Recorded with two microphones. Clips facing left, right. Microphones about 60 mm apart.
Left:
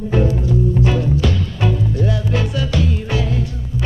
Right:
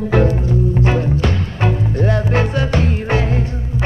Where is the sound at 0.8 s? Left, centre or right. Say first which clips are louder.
Right 1 dB; right.